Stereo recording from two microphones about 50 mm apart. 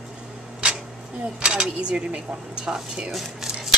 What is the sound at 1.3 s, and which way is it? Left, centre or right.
A woman's voice, centre.